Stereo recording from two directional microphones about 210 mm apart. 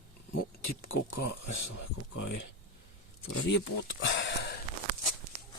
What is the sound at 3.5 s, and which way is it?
Speech, 60° left (ahead or behind).